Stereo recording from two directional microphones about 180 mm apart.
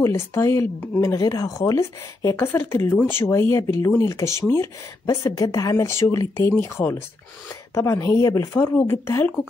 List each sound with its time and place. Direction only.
0.0 s speech: 15° left (ahead or behind)